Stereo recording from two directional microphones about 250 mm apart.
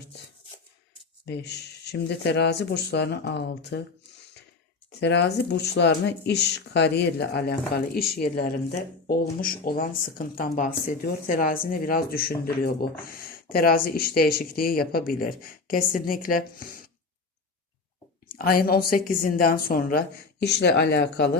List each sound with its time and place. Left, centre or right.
1.2 s speech: left
4.9 s speech: left
9.0 s speech: left
18.3 s speech: left